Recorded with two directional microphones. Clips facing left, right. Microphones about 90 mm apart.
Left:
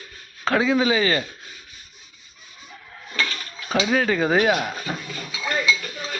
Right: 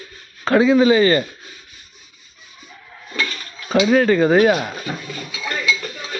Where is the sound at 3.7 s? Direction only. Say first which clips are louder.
Right 6 dB; centre (ahead or behind).